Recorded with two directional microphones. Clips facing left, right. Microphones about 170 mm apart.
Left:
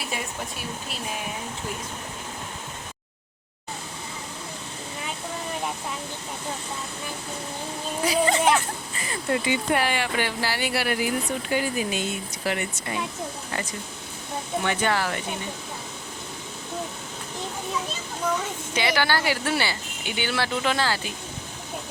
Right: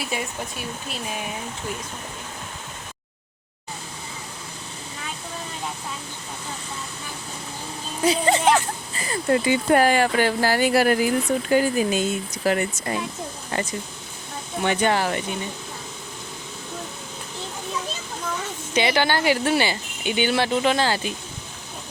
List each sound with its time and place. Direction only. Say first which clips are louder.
8.0 s a sound: right 2 dB; 25° right (ahead or behind)
9.0 s speech: right 5 dB; 40° right (ahead or behind)
14.6 s speech: right 5 dB; 20° right (ahead or behind)
18.7 s speech: right 3 dB; 20° right (ahead or behind)